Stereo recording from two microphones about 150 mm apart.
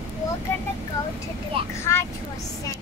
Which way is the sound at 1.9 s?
20° left (ahead or behind).